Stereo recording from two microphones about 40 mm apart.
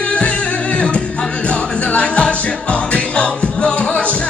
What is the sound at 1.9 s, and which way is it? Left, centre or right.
Music, left.